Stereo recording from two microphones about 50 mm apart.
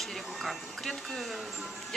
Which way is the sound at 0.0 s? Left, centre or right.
Centre.